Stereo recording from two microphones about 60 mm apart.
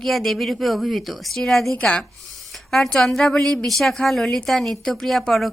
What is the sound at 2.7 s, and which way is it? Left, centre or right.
Speech, centre.